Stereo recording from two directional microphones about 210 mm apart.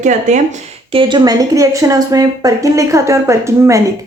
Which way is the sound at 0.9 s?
25° right (ahead or behind).